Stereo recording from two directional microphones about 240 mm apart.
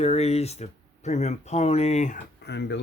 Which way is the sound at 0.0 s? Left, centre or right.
Left.